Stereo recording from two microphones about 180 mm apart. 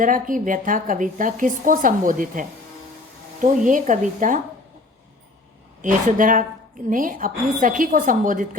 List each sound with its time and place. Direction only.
0.0 s a woman's voice: 50° right (ahead or behind)
5.8 s a woman's voice: 45° right (ahead or behind)